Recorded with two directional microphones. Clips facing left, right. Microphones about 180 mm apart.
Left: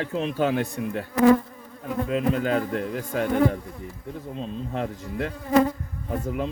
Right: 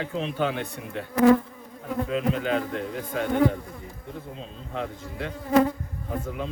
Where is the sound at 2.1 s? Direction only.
45° left (ahead or behind).